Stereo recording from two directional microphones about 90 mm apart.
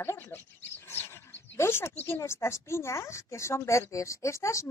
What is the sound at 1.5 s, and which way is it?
A woman's voice, 30° left (ahead or behind).